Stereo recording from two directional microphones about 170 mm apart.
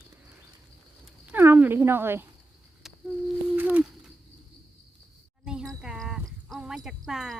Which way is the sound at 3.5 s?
10° right (ahead or behind).